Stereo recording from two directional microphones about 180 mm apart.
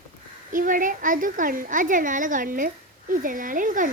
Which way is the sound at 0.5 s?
50° right (ahead or behind).